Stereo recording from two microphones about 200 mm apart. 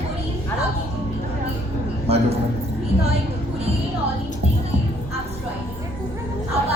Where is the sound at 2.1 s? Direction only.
30° right (ahead or behind).